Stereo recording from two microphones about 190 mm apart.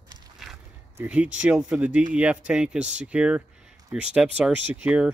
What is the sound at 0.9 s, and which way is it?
Speech, 5° right (ahead or behind).